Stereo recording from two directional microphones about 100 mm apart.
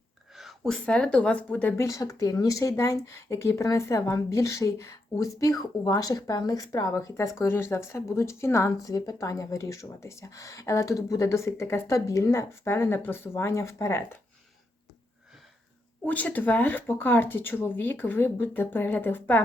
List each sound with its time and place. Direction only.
0.3 s speech: centre (ahead or behind)
1.7 s speech: 30° left (ahead or behind)
16.0 s speech: 15° left (ahead or behind)